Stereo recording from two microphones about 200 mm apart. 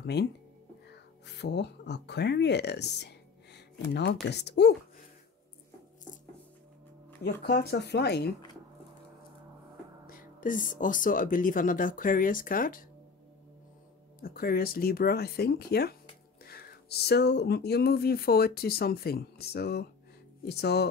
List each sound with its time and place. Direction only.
0.0 s speech: 55° left (ahead or behind)
7.4 s speech: 55° left (ahead or behind)
10.0 s speech: 45° left (ahead or behind)
14.2 s speech: 50° left (ahead or behind)